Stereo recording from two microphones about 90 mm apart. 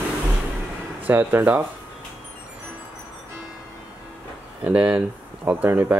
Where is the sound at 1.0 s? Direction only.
20° right (ahead or behind).